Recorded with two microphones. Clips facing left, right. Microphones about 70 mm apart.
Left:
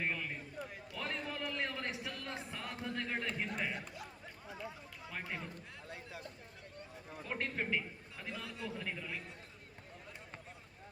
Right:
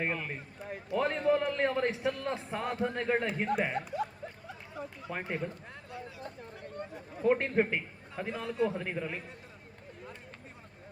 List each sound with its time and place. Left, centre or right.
0.0 s a man's voice: right
5.0 s speech: right
6.6 s a sound: right
7.2 s a man's voice: right